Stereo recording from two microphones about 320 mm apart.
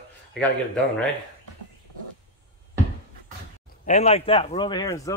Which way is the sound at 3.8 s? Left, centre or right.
Centre.